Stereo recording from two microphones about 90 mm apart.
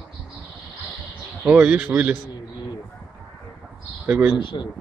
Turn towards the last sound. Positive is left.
turn(degrees=60)  # may be behind; listen again after turning